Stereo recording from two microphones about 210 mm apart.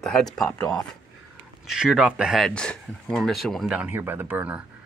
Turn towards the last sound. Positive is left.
turn(degrees=-5)  # may be behind; listen again after turning